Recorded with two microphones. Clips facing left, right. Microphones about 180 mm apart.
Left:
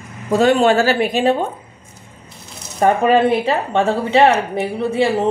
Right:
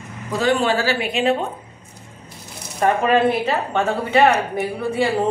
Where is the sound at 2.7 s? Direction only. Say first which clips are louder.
Left 3 dB; 30° left (ahead or behind).